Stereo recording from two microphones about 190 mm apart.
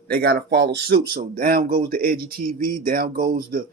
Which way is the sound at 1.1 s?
50° right (ahead or behind).